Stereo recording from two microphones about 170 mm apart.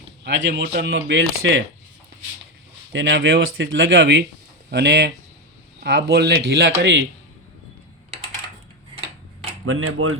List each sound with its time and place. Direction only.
0.3 s speech: 90° right
2.9 s speech: 90° right